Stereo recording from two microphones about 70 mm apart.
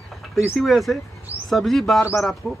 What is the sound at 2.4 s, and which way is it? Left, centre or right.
Speech, left.